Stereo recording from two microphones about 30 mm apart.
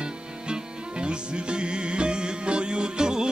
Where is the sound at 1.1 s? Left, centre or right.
Right.